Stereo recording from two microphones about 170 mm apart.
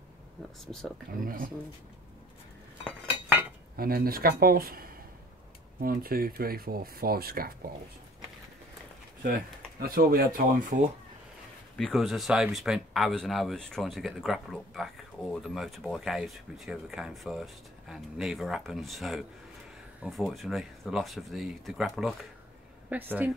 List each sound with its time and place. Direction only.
1.2 s speech: 55° right (ahead or behind)
3.7 s speech: 60° right (ahead or behind)
9.8 s speech: 60° right (ahead or behind)
11.7 s speech: centre (ahead or behind)